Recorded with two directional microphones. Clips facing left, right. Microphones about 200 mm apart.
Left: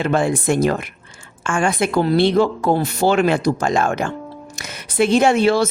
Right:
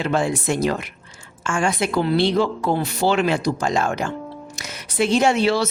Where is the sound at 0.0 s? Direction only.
55° left (ahead or behind).